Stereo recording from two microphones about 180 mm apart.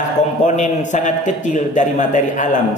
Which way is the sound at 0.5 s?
45° left (ahead or behind).